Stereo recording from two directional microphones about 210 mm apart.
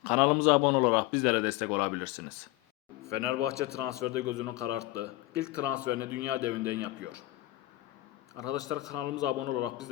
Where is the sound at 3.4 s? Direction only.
15° left (ahead or behind).